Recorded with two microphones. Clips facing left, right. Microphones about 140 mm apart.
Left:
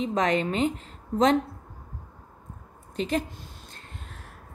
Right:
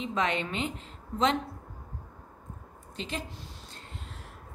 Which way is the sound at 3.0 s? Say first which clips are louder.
Left 10 dB; 50° left (ahead or behind).